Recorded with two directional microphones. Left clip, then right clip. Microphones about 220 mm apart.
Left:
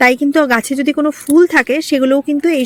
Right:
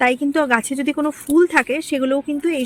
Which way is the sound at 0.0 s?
25° left (ahead or behind).